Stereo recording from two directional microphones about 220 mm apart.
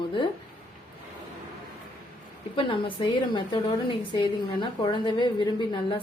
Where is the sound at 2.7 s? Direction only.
20° left (ahead or behind).